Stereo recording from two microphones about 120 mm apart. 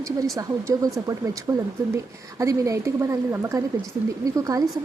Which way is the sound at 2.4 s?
25° right (ahead or behind).